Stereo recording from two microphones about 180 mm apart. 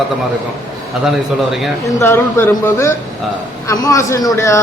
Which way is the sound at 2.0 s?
15° left (ahead or behind).